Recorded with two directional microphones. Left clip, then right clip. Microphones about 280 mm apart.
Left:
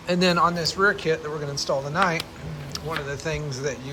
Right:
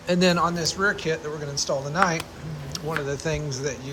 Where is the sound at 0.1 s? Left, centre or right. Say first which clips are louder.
Left 1 dB; centre.